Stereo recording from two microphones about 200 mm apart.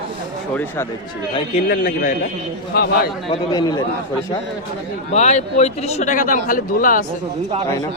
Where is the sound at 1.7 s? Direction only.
40° left (ahead or behind).